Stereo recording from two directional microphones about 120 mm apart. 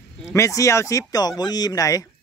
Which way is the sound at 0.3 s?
25° left (ahead or behind).